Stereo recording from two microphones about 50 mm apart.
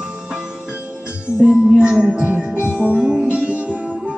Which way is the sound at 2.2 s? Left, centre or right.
Right.